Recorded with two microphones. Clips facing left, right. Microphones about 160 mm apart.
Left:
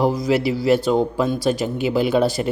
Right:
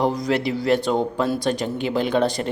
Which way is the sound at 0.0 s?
5° left (ahead or behind).